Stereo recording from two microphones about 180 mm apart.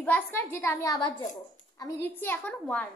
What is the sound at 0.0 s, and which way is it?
A woman's voice, 10° left (ahead or behind).